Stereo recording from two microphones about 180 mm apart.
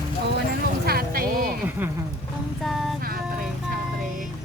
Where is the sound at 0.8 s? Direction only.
55° right (ahead or behind).